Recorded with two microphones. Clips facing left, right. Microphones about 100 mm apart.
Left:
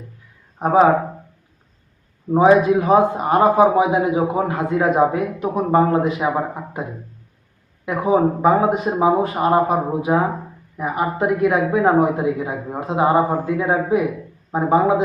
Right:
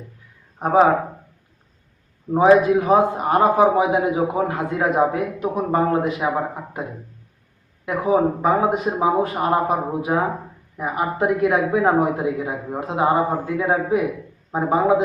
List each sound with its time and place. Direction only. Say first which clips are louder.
0.6 s speech: left 1 dB; 5° left (ahead or behind)
2.3 s a man's voice: left 1 dB; 10° left (ahead or behind)
7.9 s a man's voice: left 1 dB; 5° left (ahead or behind)